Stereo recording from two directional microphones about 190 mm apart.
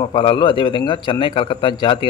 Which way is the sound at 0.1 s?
25° left (ahead or behind).